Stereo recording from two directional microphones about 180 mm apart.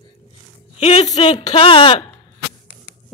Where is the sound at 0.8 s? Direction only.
35° left (ahead or behind).